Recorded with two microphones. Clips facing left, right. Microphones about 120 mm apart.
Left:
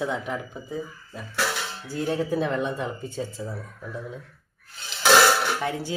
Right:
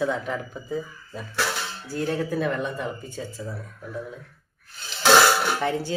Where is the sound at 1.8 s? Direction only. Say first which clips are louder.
Even; 15° left (ahead or behind).